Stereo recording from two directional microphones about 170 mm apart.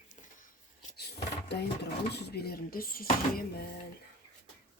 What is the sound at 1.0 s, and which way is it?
Speech, 75° left (ahead or behind).